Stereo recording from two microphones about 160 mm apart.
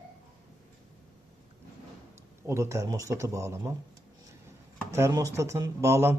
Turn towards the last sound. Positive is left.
turn(degrees=-15)  # may be behind; listen again after turning